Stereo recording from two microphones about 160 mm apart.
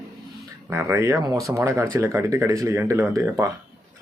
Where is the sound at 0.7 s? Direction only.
15° right (ahead or behind).